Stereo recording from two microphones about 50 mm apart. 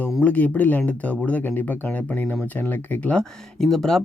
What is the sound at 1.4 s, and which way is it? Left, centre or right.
Speech, left.